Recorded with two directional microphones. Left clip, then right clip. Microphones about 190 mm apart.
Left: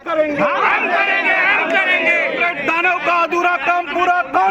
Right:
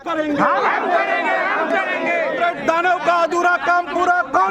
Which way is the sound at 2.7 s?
45° right (ahead or behind).